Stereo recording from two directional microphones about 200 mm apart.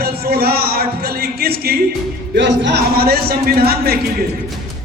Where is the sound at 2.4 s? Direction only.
60° right (ahead or behind).